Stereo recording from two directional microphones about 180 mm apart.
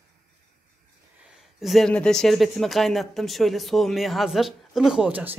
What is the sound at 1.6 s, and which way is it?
Speech, centre (ahead or behind).